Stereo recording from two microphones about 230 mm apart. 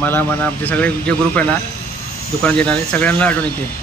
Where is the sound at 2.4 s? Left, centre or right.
Centre.